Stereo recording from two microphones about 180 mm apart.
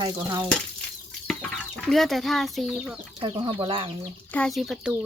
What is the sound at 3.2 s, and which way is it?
Speech, 30° right (ahead or behind).